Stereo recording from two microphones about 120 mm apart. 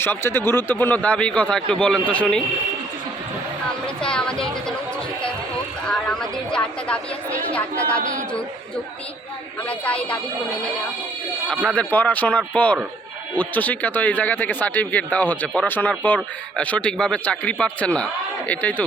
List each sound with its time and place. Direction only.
0.0 s speech: 20° left (ahead or behind)
3.8 s speech: 5° left (ahead or behind)
9.6 s speech: 10° left (ahead or behind)
11.5 s speech: 10° left (ahead or behind)